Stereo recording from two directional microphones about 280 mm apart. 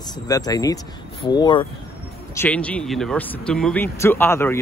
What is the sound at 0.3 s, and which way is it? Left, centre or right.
Speech, centre.